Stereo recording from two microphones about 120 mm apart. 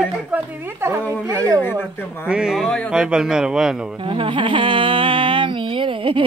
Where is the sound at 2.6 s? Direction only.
10° left (ahead or behind).